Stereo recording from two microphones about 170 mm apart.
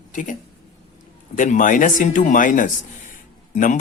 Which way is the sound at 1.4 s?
50° left (ahead or behind).